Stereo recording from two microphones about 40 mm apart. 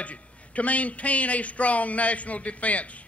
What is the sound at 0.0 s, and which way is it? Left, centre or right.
A man's voice, left.